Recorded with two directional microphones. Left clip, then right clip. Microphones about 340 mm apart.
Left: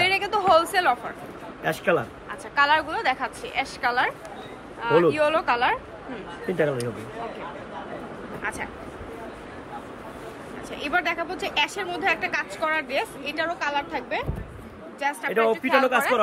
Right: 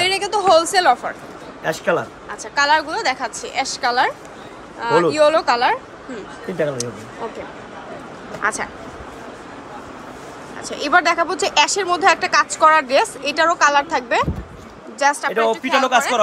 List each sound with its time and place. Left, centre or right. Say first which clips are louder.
0.0 s a sound: right 4 dB; centre
1.6 s speech: right 4 dB; centre
8.4 s speech: right 10 dB; centre
10.7 s speech: right 9 dB; centre